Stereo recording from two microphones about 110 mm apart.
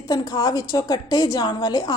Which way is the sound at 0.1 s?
35° left (ahead or behind).